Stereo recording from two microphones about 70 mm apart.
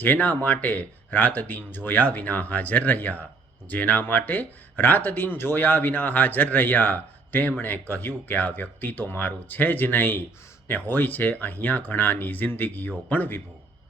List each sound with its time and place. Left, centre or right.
0.0 s speech: left